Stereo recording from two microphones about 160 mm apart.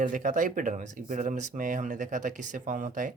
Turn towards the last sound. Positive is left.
turn(degrees=-55)  # may be behind; listen again after turning